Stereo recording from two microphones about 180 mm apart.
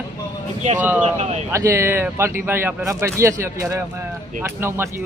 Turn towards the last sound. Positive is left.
turn(degrees=-10)  # may be behind; listen again after turning